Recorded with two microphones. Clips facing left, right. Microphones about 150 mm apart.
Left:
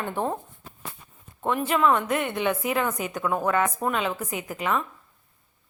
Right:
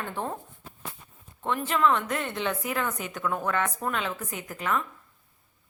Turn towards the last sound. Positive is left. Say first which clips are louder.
# left 3 dB
turn(degrees=15)  # may be behind; listen again after turning